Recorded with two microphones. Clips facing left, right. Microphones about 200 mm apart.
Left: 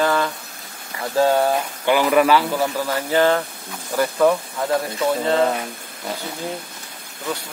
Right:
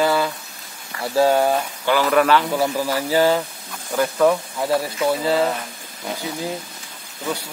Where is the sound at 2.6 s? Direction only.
10° right (ahead or behind).